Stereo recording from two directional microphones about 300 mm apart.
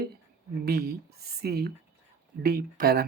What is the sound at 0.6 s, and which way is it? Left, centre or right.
Speech, right.